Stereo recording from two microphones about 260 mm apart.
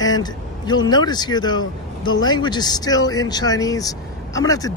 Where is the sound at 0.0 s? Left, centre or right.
Centre.